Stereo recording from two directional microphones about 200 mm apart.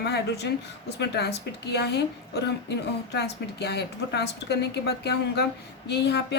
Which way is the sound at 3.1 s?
55° left (ahead or behind).